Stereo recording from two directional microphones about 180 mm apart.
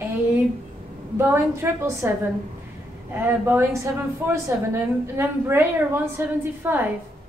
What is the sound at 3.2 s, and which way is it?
A woman's voice, 10° right (ahead or behind).